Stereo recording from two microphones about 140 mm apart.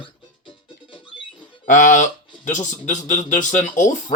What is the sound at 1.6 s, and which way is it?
Speech, 65° left (ahead or behind).